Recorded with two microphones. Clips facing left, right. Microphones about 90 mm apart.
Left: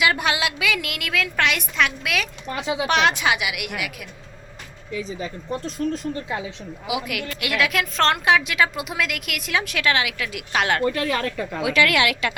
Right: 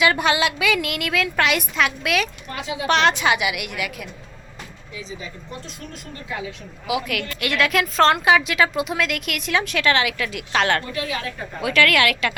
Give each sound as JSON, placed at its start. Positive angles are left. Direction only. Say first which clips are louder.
{"t": 0.0, "sound": "a woman's voice", "louder": "right 3 dB", "side_deg": 5}
{"t": 4.9, "sound": "speech", "louder": "left 5 dB", "side_deg": 45}
{"t": 6.8, "sound": "a woman's voice", "louder": "right 2 dB", "side_deg": 15}
{"t": 10.8, "sound": "a woman's voice", "louder": "left 5 dB", "side_deg": 50}
{"t": 11.6, "sound": "a woman's voice", "louder": "right 1 dB", "side_deg": 15}